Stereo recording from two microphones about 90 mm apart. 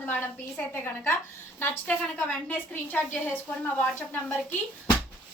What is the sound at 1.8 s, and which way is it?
A woman's voice, 15° left (ahead or behind).